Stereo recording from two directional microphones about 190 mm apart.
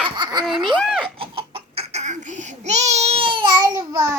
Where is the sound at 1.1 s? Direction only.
30° right (ahead or behind).